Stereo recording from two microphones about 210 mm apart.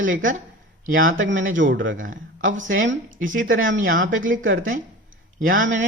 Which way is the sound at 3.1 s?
40° right (ahead or behind).